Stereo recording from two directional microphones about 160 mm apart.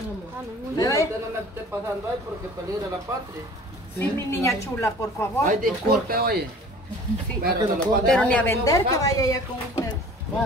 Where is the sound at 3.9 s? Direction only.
15° left (ahead or behind).